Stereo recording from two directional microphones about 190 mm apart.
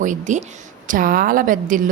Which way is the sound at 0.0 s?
40° right (ahead or behind).